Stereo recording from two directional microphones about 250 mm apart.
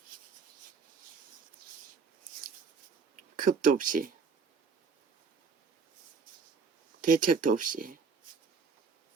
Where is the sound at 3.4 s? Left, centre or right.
Right.